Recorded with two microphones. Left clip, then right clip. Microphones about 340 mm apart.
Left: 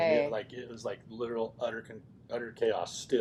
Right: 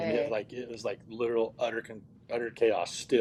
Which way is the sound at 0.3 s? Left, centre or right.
Right.